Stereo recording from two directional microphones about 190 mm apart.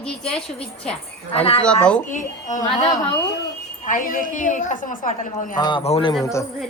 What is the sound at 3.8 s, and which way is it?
A woman's voice, 45° left (ahead or behind).